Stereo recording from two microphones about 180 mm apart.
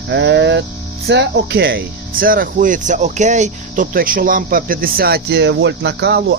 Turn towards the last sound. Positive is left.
turn(degrees=-70)  # may be behind; listen again after turning